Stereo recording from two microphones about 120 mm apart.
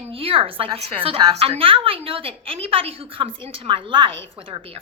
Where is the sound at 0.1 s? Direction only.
50° right (ahead or behind).